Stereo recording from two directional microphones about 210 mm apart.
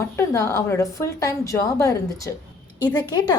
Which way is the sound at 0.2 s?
15° left (ahead or behind).